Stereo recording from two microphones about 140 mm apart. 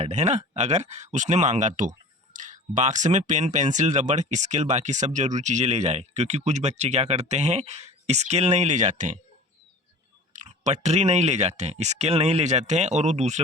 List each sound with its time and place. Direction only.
0.0 s speech: 55° right (ahead or behind)
10.3 s speech: 55° right (ahead or behind)